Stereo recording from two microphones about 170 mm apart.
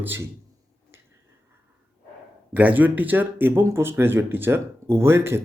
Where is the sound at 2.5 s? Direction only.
10° right (ahead or behind).